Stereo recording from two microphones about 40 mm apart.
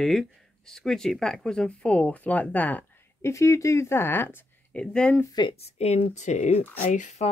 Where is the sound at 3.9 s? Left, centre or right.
Left.